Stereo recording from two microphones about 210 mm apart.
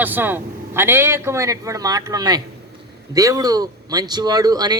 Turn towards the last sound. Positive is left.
turn(degrees=-20)  # may be behind; listen again after turning